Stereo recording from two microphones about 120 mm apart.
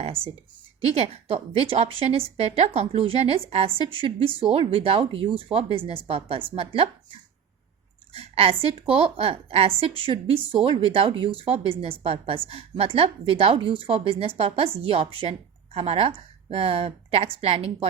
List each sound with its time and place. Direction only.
0.9 s a woman's voice: 60° right (ahead or behind)
8.1 s a woman's voice: 55° right (ahead or behind)